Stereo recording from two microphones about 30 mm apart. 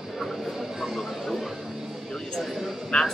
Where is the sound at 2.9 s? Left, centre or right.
Left.